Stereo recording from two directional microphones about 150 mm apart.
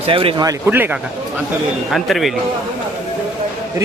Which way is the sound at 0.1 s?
35° right (ahead or behind).